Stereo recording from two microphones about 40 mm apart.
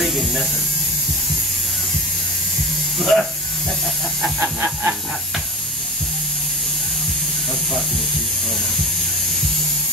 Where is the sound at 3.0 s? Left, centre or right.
Centre.